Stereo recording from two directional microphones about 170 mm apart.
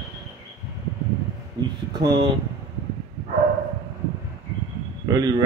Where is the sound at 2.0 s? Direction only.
25° right (ahead or behind).